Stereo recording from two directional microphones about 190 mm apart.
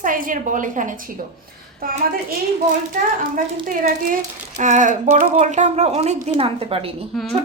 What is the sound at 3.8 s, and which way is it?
Speech, 45° right (ahead or behind).